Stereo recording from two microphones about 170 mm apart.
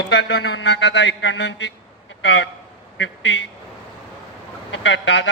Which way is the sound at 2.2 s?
90° left.